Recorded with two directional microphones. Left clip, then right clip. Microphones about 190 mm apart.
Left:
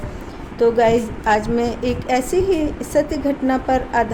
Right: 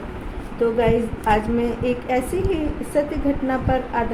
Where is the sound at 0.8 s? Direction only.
55° left (ahead or behind).